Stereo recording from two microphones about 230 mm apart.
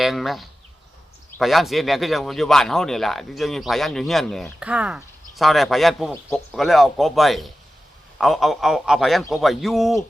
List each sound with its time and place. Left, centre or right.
0.0 s speech: centre